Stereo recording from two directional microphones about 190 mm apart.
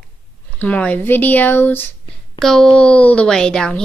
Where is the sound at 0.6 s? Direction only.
10° left (ahead or behind).